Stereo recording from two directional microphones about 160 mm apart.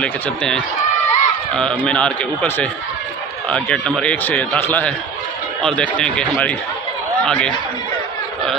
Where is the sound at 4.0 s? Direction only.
5° left (ahead or behind).